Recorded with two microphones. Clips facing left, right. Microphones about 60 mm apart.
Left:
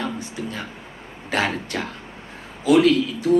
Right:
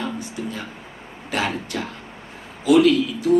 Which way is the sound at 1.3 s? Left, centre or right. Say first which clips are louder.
Left 1 dB; left.